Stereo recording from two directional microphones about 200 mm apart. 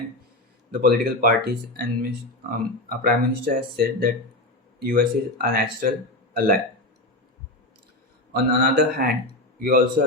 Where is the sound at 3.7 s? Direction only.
50° right (ahead or behind).